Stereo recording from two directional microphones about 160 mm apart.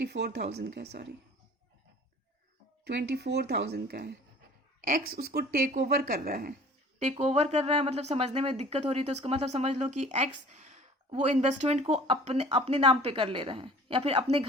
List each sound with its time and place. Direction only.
0.0 s speech: 90° right
2.8 s speech: 90° right
4.9 s speech: 65° right (ahead or behind)
7.0 s a woman's voice: 45° right (ahead or behind)